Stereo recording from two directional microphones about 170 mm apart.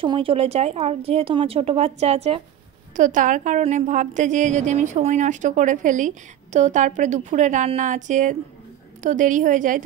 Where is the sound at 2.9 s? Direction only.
50° right (ahead or behind).